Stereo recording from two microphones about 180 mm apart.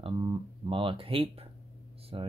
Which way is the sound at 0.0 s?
30° right (ahead or behind).